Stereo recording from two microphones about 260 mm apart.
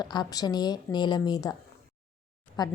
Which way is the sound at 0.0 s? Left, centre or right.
Centre.